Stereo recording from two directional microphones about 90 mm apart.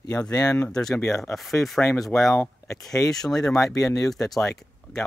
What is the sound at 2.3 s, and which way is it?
Speech, 25° left (ahead or behind).